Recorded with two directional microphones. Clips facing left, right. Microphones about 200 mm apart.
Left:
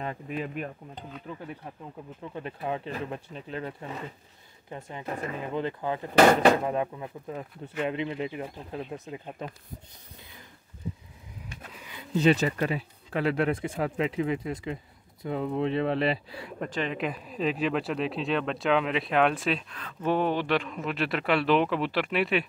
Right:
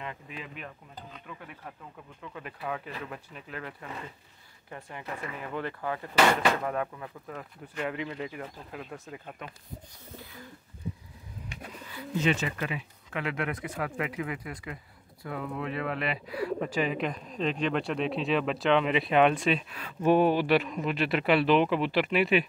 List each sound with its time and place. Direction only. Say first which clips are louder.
0.0 s speech: left 8 dB; 40° left (ahead or behind)
1.2 s speech: left 5 dB; 30° left (ahead or behind)
11.8 s pigeon: right 4 dB; 20° left (ahead or behind)
12.2 s speech: left 6 dB; 35° left (ahead or behind)
16.5 s speech: left 1 dB; 5° right (ahead or behind)
19.7 s speech: right 4 dB; 10° right (ahead or behind)